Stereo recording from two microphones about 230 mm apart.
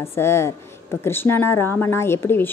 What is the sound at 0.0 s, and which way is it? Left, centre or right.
A woman's voice, centre.